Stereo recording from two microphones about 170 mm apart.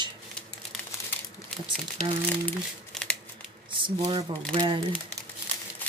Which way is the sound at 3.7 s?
30° right (ahead or behind).